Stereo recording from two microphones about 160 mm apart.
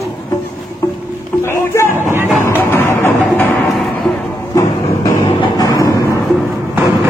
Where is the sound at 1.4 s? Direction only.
15° left (ahead or behind).